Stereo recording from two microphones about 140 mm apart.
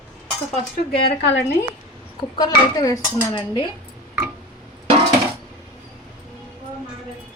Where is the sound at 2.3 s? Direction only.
25° left (ahead or behind).